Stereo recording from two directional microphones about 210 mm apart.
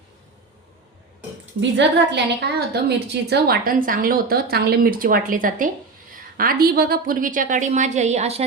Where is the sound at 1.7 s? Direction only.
55° right (ahead or behind).